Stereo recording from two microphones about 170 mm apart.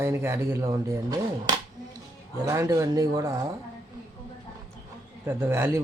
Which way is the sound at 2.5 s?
20° right (ahead or behind).